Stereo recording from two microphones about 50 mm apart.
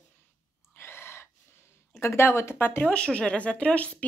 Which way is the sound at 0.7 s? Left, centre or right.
Left.